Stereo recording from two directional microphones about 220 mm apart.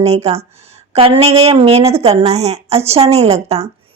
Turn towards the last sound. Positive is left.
turn(degrees=-30)  # may be behind; listen again after turning